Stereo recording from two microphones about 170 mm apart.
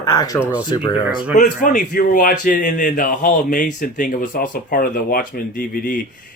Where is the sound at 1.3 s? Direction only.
50° left (ahead or behind).